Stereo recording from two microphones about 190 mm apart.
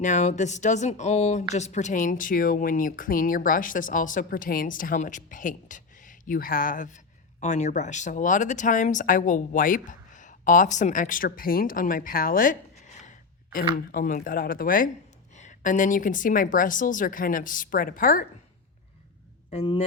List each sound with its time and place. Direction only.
0.0 s speech: 40° left (ahead or behind)
19.5 s speech: 30° left (ahead or behind)